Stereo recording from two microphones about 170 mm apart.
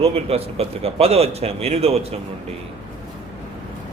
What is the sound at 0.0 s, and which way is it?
Speech, 35° right (ahead or behind).